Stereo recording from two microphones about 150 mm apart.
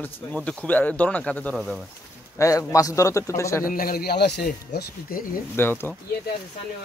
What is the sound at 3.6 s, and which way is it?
Speech, 75° left (ahead or behind).